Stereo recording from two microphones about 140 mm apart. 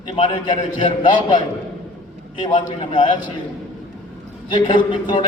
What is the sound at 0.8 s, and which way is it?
Speech, 35° left (ahead or behind).